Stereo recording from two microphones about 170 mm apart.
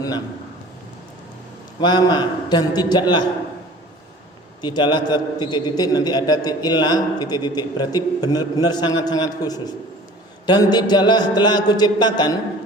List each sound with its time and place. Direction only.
1.8 s a man's voice: 25° left (ahead or behind)
4.6 s a man's voice: 25° left (ahead or behind)